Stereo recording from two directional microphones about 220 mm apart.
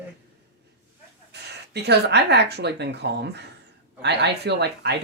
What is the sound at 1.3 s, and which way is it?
Speech, 50° right (ahead or behind).